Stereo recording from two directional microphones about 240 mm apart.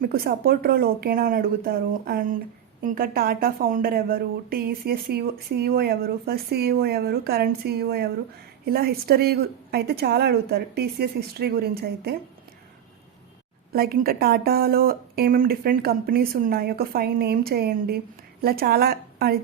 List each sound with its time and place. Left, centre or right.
0.0 s speech: right
13.7 s speech: right